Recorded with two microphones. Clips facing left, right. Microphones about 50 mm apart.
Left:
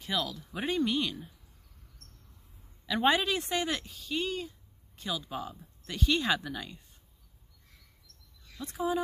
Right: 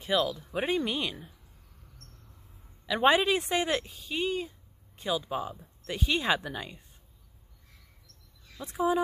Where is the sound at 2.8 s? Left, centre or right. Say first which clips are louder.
Right 3 dB; centre.